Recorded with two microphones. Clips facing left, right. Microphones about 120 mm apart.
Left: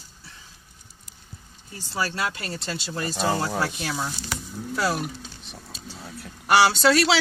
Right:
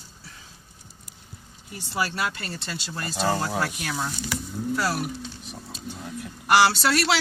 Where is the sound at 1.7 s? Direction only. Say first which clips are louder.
Even; 20° right (ahead or behind).